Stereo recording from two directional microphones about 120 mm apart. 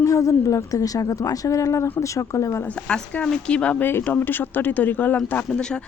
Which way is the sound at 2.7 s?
10° left (ahead or behind).